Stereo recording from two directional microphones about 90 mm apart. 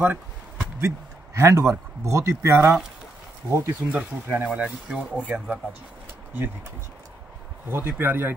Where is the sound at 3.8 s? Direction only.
15° right (ahead or behind).